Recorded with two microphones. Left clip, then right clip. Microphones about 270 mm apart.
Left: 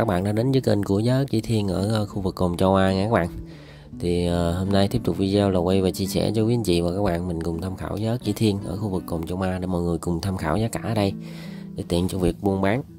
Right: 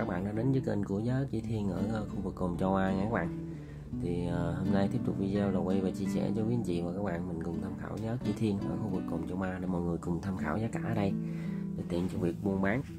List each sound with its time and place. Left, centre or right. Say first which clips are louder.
0.0 s speech: left 11 dB; left